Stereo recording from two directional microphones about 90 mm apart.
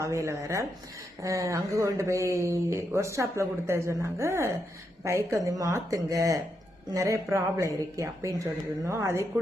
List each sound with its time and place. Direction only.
0.0 s speech: 35° right (ahead or behind)